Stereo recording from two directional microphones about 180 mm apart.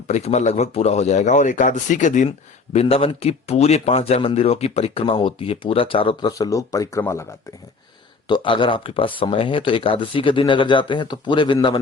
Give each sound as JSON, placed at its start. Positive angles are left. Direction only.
{"t": 0.1, "sound": "speech", "side_deg": 40}
{"t": 2.7, "sound": "speech", "side_deg": 30}
{"t": 8.3, "sound": "speech", "side_deg": 25}